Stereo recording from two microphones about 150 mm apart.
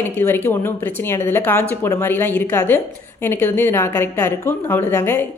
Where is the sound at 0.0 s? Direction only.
15° left (ahead or behind).